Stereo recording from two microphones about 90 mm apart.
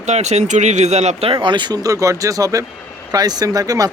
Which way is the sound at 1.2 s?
80° right.